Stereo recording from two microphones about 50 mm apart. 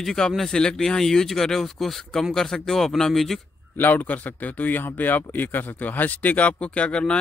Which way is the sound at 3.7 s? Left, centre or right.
Left.